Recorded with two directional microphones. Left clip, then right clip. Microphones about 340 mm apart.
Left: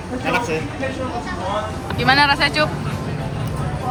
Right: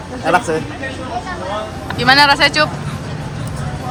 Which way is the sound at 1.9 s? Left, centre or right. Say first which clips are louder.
Right 5 dB; centre.